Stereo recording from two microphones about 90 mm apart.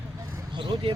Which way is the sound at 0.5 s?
65° right (ahead or behind).